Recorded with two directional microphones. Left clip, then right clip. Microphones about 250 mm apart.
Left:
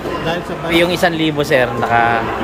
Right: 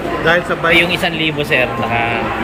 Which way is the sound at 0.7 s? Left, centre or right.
Left.